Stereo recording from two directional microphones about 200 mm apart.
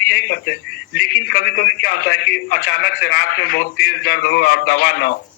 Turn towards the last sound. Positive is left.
turn(degrees=50)  # may be behind; listen again after turning